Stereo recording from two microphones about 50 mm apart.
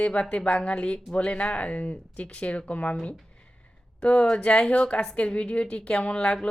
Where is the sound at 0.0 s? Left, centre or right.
Left.